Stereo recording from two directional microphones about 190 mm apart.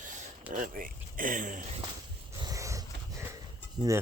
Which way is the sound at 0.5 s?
45° right (ahead or behind).